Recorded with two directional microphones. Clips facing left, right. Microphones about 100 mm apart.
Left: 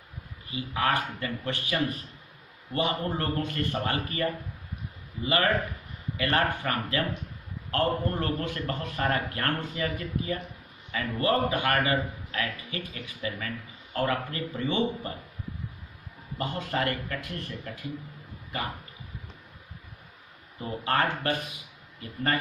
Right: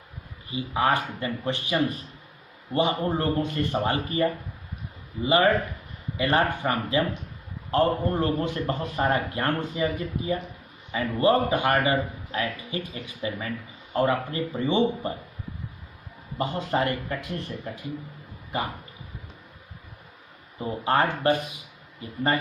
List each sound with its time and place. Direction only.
0.5 s a man's voice: 25° right (ahead or behind)
16.3 s a man's voice: 25° right (ahead or behind)
20.5 s a man's voice: 25° right (ahead or behind)